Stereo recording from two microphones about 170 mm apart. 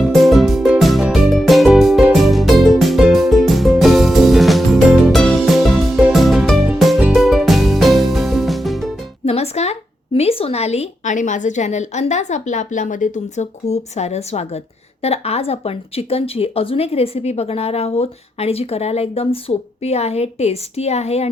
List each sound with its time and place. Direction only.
0.0 s music: centre (ahead or behind)
9.2 s music: 40° left (ahead or behind)
10.2 s a woman's voice: 35° left (ahead or behind)